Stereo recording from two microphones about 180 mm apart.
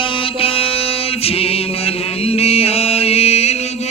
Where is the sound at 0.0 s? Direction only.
30° left (ahead or behind).